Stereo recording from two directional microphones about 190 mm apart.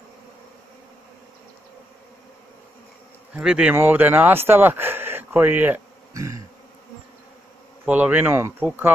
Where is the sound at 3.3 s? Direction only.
5° right (ahead or behind).